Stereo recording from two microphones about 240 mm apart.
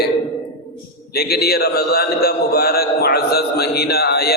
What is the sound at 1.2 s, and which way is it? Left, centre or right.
A man's voice, left.